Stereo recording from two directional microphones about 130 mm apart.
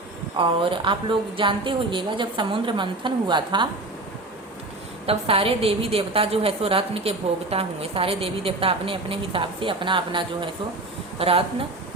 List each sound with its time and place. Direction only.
0.3 s a woman's voice: 40° right (ahead or behind)
5.0 s a woman's voice: 45° right (ahead or behind)